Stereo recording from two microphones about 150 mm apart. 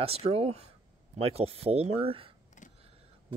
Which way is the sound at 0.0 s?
40° right (ahead or behind).